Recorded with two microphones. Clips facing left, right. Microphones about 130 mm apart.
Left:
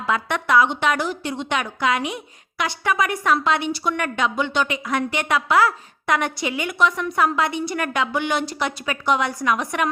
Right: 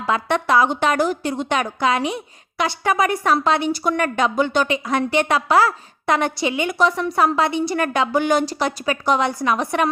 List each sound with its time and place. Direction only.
0.0 s a woman's voice: 30° right (ahead or behind)
4.7 s a woman's voice: 30° right (ahead or behind)